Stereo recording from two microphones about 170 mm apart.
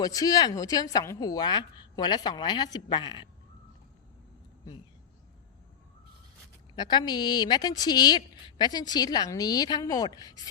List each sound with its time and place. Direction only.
0.0 s a woman's voice: 20° left (ahead or behind)
6.7 s a woman's voice: 25° left (ahead or behind)